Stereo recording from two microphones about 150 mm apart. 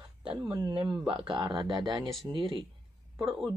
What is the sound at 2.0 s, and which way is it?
Speech, centre (ahead or behind).